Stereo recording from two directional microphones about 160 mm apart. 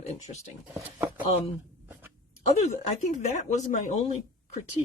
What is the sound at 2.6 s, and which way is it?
Speech, 45° left (ahead or behind).